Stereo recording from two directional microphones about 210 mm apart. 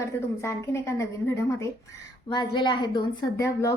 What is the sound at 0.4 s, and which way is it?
A woman's voice, 15° left (ahead or behind).